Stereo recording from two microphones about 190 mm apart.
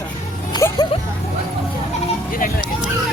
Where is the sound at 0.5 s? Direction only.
20° left (ahead or behind).